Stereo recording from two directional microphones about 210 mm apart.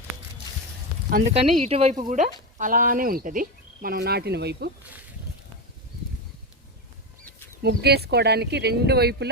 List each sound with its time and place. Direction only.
1.1 s speech: 35° right (ahead or behind); by 4.7 s 50° right (ahead or behind)
7.6 s speech: 50° right (ahead or behind)